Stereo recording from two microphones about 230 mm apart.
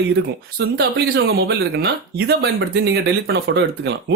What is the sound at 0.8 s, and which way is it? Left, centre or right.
Speech, right.